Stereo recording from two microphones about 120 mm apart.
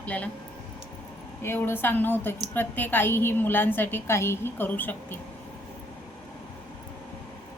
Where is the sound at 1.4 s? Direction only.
20° left (ahead or behind).